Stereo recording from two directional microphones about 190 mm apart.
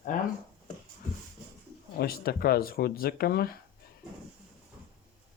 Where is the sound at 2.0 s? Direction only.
55° left (ahead or behind).